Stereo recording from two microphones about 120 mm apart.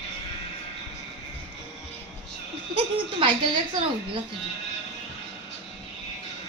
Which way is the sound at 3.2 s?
40° right (ahead or behind).